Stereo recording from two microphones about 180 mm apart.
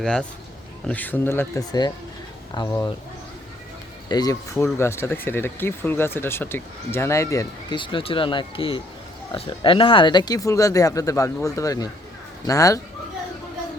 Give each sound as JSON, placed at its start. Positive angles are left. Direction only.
{"t": 0.0, "sound": "a man's voice", "side_deg": 5}
{"t": 4.1, "sound": "speech", "side_deg": 20}